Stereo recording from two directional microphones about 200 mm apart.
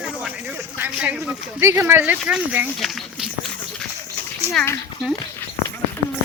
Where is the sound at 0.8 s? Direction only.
5° right (ahead or behind).